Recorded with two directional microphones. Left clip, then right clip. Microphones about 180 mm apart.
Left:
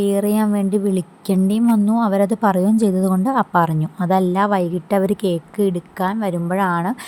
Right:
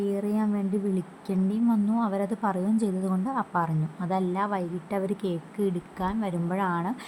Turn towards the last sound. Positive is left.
turn(degrees=40)  # may be behind; listen again after turning